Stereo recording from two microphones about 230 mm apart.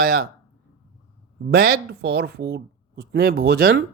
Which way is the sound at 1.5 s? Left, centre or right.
Right.